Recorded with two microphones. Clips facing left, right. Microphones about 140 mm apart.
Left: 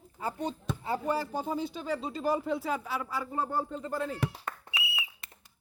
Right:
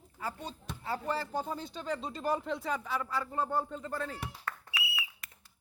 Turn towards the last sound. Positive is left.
turn(degrees=20)  # may be behind; listen again after turning